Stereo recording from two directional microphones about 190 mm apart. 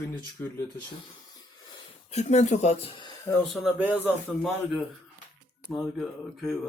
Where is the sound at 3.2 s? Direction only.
5° left (ahead or behind).